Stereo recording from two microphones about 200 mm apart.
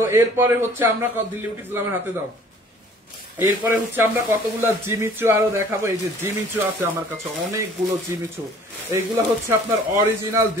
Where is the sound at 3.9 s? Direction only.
10° right (ahead or behind).